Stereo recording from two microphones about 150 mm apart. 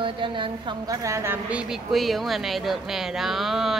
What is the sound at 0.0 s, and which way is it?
Speech, 35° right (ahead or behind).